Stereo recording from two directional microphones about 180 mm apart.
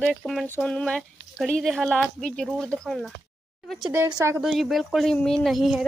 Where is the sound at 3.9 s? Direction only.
15° right (ahead or behind).